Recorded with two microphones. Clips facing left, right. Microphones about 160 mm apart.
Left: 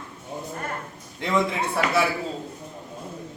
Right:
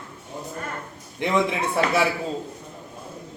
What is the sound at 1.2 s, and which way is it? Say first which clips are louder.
Speech: right 1 dB; 20° right (ahead or behind).